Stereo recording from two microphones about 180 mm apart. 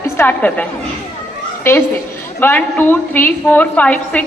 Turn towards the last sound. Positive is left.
turn(degrees=5)  # may be behind; listen again after turning